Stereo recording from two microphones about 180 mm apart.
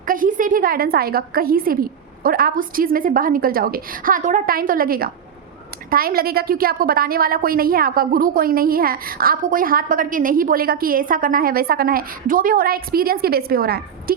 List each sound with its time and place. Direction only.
0.0 s a woman's voice: 50° right (ahead or behind)